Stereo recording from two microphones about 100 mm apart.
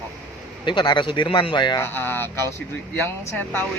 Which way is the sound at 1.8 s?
20° left (ahead or behind).